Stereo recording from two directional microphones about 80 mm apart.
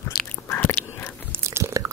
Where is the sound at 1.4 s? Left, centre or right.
Right.